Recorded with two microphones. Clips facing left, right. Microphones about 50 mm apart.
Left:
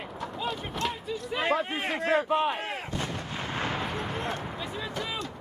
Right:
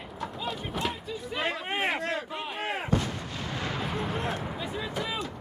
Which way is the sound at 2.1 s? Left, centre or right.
Left.